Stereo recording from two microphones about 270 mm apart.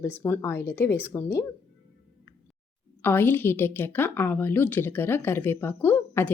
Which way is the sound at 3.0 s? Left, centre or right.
Centre.